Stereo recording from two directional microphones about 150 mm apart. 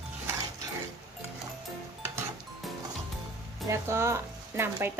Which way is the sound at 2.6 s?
Centre (ahead or behind).